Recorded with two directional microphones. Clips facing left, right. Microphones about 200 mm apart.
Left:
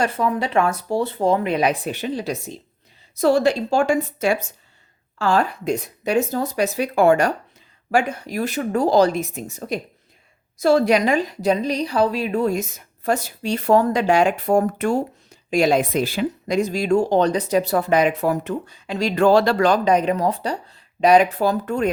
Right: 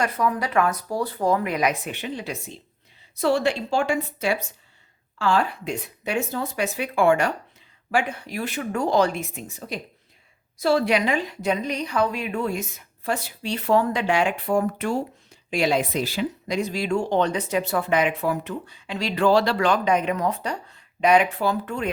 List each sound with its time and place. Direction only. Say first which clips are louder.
0.0 s a woman's voice: left 3 dB; 25° left (ahead or behind)